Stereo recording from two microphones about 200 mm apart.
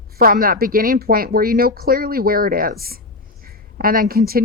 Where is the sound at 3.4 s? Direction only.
45° right (ahead or behind).